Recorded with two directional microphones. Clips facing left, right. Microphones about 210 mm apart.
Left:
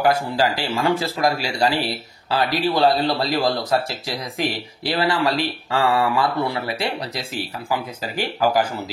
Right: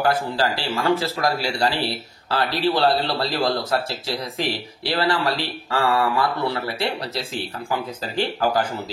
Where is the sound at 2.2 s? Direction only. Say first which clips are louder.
Left 1 dB; 15° left (ahead or behind).